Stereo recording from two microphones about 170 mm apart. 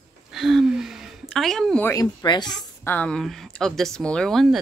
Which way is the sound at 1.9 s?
20° left (ahead or behind).